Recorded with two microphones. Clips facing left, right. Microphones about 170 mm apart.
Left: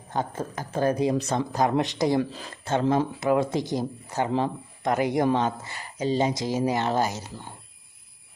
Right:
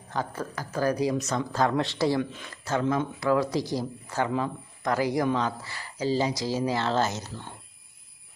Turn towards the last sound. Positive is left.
turn(degrees=10)  # may be behind; listen again after turning